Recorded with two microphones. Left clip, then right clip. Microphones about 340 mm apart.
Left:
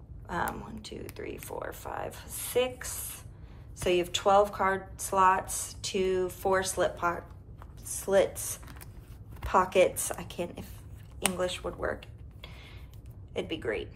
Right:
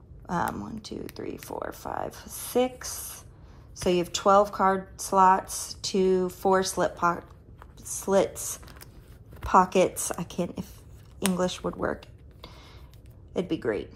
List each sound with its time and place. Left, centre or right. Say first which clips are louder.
0.3 s speech: right 4 dB; centre
11.1 s a sound: right 3 dB; centre
13.3 s speech: right 4 dB; centre